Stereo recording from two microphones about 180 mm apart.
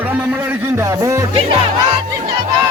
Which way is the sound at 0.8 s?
15° right (ahead or behind).